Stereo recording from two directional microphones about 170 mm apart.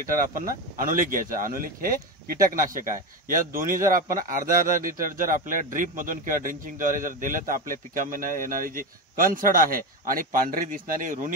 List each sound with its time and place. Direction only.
0.0 s a man's voice: 55° right (ahead or behind)